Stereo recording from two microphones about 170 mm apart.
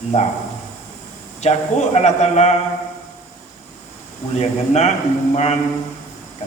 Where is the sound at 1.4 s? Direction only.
40° left (ahead or behind).